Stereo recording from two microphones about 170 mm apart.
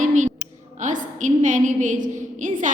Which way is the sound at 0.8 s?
50° right (ahead or behind).